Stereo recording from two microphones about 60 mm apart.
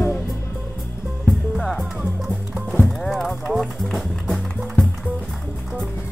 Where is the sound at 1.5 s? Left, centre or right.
Centre.